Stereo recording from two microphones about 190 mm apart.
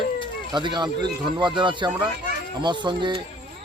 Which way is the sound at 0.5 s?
25° right (ahead or behind).